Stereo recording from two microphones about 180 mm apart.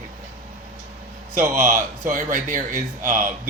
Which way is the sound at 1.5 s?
45° right (ahead or behind).